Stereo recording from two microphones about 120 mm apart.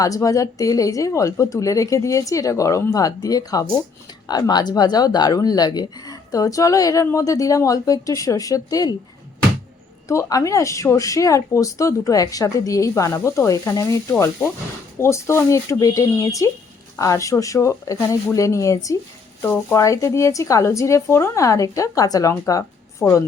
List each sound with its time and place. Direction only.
0.0 s speech: 30° left (ahead or behind)
10.1 s speech: 25° left (ahead or behind)